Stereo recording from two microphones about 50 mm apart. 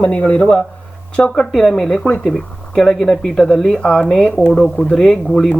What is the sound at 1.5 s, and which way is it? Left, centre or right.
A man's voice, centre.